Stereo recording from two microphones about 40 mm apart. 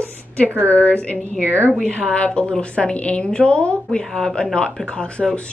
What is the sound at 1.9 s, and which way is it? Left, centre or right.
A woman's voice, left.